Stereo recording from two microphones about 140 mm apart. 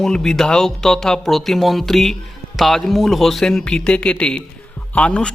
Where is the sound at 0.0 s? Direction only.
5° left (ahead or behind).